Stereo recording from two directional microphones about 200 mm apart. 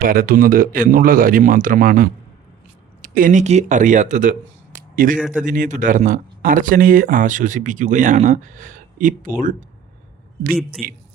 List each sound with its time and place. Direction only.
0.0 s speech: 45° right (ahead or behind)
5.2 s speech: 5° right (ahead or behind)
5.5 s speech: 40° right (ahead or behind)
10.8 s speech: centre (ahead or behind)